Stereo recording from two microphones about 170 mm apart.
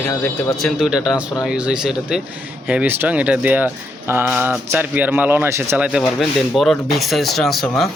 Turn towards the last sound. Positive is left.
turn(degrees=0)  # may be behind; listen again after turning